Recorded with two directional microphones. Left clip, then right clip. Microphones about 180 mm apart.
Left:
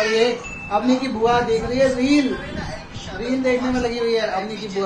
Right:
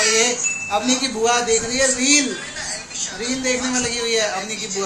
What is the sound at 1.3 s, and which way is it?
Speech, 50° right (ahead or behind).